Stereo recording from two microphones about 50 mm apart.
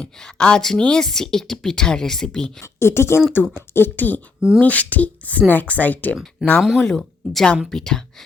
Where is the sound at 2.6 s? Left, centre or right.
Left.